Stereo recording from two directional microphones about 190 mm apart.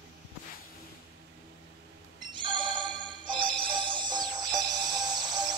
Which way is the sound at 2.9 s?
25° right (ahead or behind).